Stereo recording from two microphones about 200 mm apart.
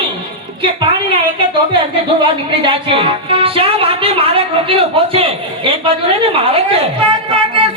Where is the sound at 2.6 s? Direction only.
25° right (ahead or behind).